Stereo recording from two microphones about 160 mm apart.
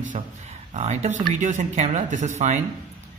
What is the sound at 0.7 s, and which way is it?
A man's voice, 45° right (ahead or behind).